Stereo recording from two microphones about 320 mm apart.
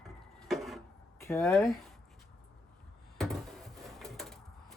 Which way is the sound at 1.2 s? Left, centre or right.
Centre.